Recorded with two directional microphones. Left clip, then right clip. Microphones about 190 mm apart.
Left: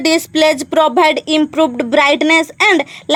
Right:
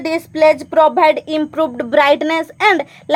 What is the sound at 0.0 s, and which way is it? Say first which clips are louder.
A woman's voice: left 1 dB; 35° left (ahead or behind).